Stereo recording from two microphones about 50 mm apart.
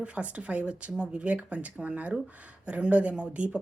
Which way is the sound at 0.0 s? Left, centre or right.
Right.